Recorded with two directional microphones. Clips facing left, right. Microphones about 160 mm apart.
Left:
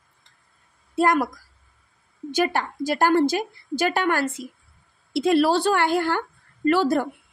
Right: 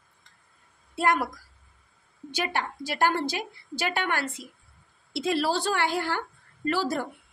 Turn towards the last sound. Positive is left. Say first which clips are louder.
# left 8 dB
turn(degrees=55)  # may be behind; listen again after turning